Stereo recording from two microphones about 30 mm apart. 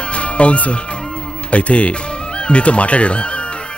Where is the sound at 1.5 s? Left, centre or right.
Left.